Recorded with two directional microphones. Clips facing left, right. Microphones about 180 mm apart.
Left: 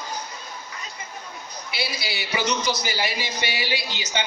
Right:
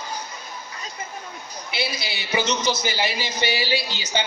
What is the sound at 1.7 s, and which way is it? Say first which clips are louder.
A man's voice: right 2 dB; 25° right (ahead or behind).